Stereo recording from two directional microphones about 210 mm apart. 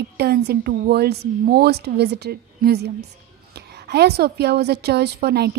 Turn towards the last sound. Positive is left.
turn(degrees=-50)  # may be behind; listen again after turning